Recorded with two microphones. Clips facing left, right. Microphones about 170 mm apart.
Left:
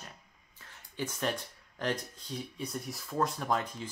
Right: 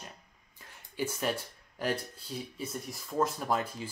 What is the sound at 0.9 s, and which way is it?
Speech, 10° right (ahead or behind).